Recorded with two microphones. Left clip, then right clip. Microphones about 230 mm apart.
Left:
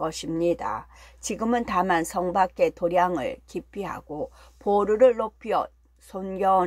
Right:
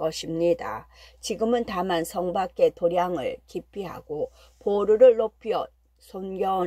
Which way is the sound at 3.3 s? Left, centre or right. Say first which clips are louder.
Right 1 dB; centre.